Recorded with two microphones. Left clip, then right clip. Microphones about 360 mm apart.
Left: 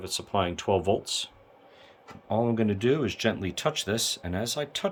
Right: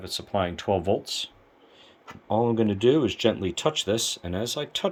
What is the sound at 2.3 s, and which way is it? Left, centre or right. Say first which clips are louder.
Speech: right 3 dB; centre.